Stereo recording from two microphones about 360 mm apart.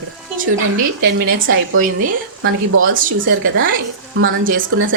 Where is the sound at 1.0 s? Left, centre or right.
Right.